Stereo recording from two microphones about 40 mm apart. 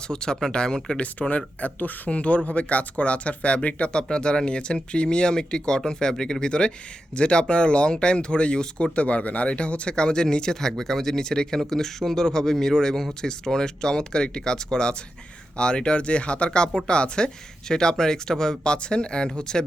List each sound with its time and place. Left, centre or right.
0.1 s speech: centre